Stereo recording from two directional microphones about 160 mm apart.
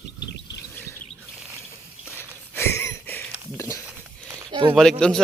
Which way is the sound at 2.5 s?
15° left (ahead or behind).